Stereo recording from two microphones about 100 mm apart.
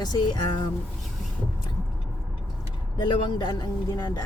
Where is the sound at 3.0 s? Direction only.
45° left (ahead or behind).